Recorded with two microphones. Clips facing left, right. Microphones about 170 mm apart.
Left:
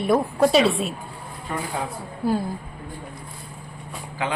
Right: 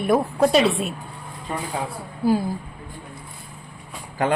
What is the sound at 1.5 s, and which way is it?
Speech, 20° right (ahead or behind).